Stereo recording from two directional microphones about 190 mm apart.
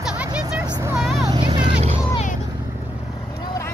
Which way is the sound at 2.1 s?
40° left (ahead or behind).